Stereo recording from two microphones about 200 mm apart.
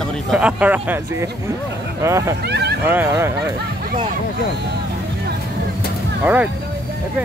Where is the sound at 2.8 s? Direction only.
10° right (ahead or behind).